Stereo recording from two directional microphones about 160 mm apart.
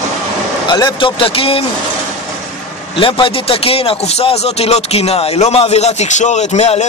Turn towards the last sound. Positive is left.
turn(degrees=45)  # may be behind; listen again after turning